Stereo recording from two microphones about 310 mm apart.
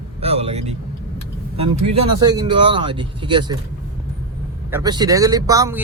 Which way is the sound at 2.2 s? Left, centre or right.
Centre.